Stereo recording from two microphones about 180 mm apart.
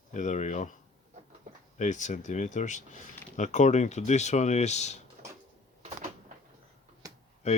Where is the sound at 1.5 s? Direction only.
45° right (ahead or behind).